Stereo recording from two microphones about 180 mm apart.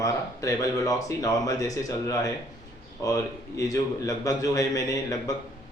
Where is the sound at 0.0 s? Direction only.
20° left (ahead or behind).